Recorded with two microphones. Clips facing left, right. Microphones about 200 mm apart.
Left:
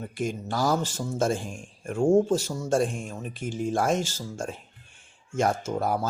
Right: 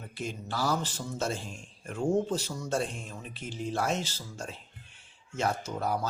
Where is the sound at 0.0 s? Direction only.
50° left (ahead or behind).